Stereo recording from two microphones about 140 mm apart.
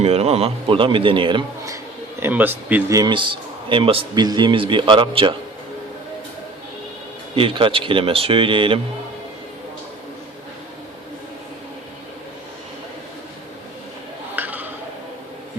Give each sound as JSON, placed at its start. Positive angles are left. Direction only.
{"t": 0.0, "sound": "a man's voice", "side_deg": -45}
{"t": 2.2, "sound": "speech", "side_deg": -15}
{"t": 2.9, "sound": "a man's voice", "side_deg": -30}
{"t": 7.3, "sound": "a man's voice", "side_deg": -40}
{"t": 14.3, "sound": "a sound", "side_deg": -15}